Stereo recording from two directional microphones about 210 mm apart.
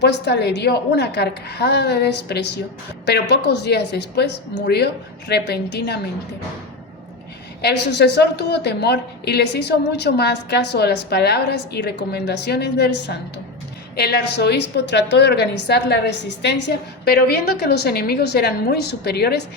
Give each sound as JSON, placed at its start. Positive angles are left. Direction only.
{"t": 0.0, "sound": "a woman's voice", "side_deg": 55}
{"t": 7.6, "sound": "a woman's voice", "side_deg": 55}